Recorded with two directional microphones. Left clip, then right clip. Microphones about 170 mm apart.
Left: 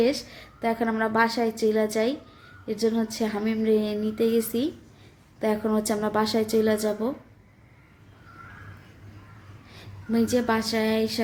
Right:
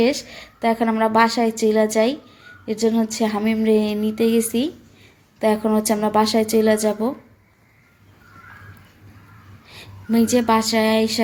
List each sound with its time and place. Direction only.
0.0 s a woman's voice: 15° right (ahead or behind)
9.6 s a woman's voice: 15° right (ahead or behind)